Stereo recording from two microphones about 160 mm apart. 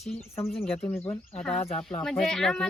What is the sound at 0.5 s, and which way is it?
Speech, 5° left (ahead or behind).